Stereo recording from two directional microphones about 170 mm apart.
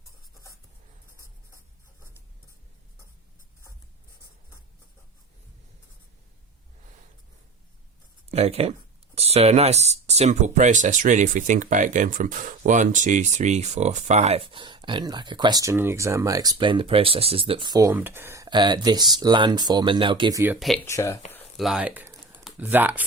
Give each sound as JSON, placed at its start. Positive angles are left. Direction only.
{"t": 8.3, "sound": "speech", "side_deg": -35}
{"t": 20.8, "sound": "speech", "side_deg": 15}
{"t": 21.6, "sound": "speech", "side_deg": -5}